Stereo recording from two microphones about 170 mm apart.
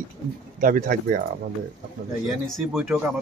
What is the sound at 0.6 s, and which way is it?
Speech, 55° right (ahead or behind).